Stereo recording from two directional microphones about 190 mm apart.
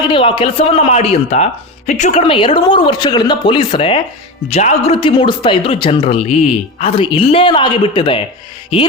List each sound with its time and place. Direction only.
0.1 s a man's voice: 25° left (ahead or behind)